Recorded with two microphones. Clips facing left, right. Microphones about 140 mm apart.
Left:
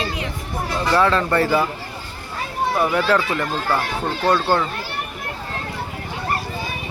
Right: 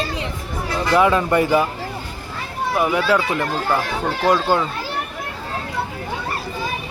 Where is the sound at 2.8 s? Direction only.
10° right (ahead or behind).